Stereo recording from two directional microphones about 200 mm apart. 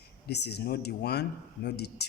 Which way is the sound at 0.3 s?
55° left (ahead or behind).